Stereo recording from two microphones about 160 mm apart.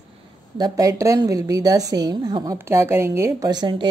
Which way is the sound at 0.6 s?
25° right (ahead or behind).